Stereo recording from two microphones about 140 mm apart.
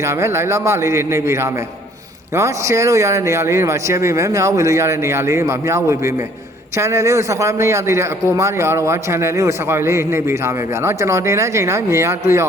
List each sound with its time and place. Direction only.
0.0 s a man's voice: 20° right (ahead or behind)